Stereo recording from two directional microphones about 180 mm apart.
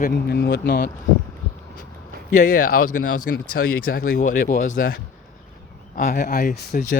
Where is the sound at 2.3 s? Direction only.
50° left (ahead or behind).